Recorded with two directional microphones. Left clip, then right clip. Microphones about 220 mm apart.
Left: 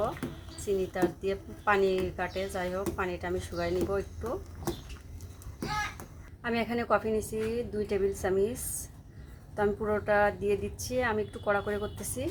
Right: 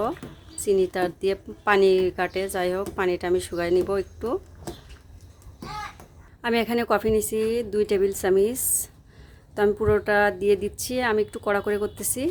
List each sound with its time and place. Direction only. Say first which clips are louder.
0.6 s speech: right 7 dB; 55° right (ahead or behind)
6.4 s speech: right 8 dB; 50° right (ahead or behind)
9.6 s speech: right 8 dB; 55° right (ahead or behind)